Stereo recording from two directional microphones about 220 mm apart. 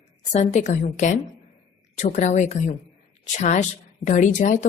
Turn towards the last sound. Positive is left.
turn(degrees=35)  # may be behind; listen again after turning